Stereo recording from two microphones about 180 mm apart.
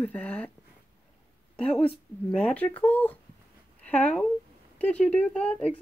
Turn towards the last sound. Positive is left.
turn(degrees=5)  # may be behind; listen again after turning